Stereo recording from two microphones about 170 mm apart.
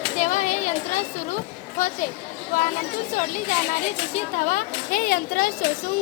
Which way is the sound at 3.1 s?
50° left (ahead or behind).